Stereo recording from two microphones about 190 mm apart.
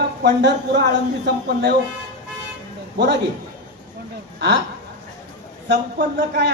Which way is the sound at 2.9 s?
65° right (ahead or behind).